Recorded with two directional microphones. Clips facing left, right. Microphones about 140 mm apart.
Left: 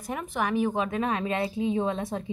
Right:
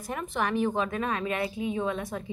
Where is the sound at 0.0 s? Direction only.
10° left (ahead or behind).